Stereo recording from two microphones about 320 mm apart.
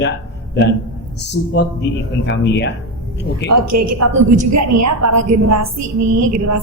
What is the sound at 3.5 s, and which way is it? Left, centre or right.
A woman's voice, right.